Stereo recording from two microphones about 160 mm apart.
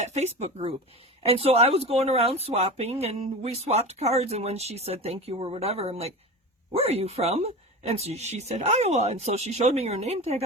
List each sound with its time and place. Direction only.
0.0 s speech: 45° right (ahead or behind)